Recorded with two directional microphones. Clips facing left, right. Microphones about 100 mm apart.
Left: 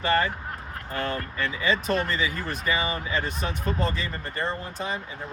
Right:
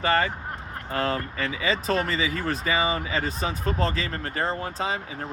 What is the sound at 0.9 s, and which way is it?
Speech, 90° right.